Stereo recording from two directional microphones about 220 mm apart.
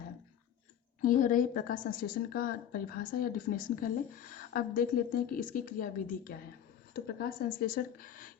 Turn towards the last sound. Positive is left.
turn(degrees=40)  # may be behind; listen again after turning